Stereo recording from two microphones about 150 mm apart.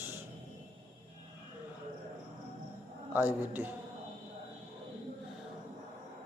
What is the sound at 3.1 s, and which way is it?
Speech, 10° right (ahead or behind).